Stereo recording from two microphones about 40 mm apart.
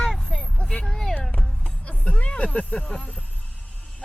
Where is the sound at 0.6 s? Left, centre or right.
Left.